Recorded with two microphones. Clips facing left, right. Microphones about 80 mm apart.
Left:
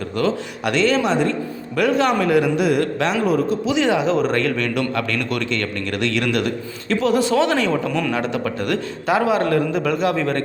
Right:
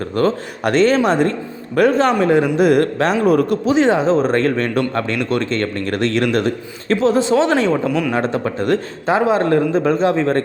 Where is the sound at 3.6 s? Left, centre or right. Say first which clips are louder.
Right 4 dB; right.